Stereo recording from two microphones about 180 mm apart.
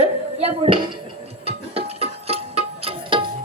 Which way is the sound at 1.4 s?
35° right (ahead or behind).